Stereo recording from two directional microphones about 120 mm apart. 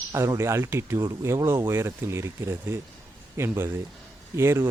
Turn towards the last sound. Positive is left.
turn(degrees=-20)  # may be behind; listen again after turning